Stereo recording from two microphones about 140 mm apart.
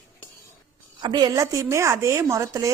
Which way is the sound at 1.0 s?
30° right (ahead or behind).